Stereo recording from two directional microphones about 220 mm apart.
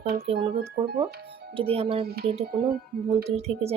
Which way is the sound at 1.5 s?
25° right (ahead or behind).